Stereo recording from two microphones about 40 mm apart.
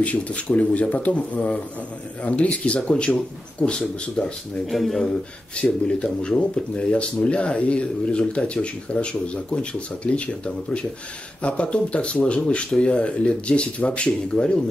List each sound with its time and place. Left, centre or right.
0.0 s speech: left
4.6 s speech: centre
5.6 s speech: left